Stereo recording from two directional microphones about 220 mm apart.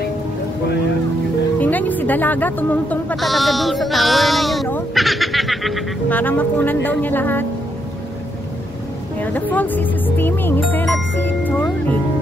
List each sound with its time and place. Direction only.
1.6 s speech: 5° left (ahead or behind)
9.2 s speech: 5° left (ahead or behind)